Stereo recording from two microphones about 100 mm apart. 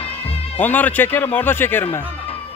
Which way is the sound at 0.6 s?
15° left (ahead or behind).